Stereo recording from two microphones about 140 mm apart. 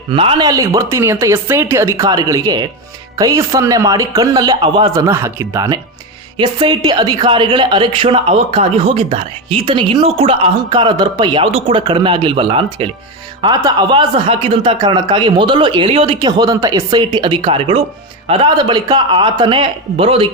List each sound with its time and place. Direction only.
0.1 s a woman's voice: 40° right (ahead or behind)
0.4 s a woman's voice: 25° right (ahead or behind); by 20.3 s 40° right (ahead or behind)